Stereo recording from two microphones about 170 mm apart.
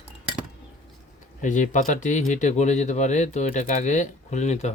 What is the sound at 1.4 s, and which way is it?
Speech, 45° left (ahead or behind).